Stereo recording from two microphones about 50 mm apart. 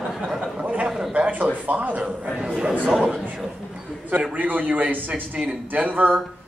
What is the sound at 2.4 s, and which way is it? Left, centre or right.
Speech, centre.